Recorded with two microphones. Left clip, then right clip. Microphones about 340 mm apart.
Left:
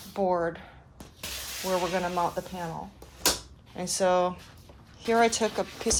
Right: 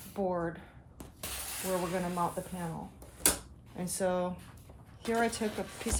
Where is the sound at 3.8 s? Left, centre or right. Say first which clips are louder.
Left 8 dB; left.